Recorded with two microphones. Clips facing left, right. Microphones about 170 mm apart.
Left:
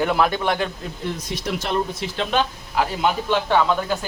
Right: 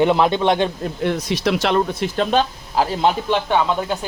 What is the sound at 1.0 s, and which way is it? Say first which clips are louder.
Speech: right 8 dB; 80° right.